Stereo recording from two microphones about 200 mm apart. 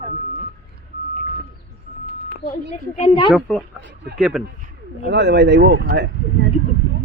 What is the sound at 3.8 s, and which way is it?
Speech, 60° right (ahead or behind).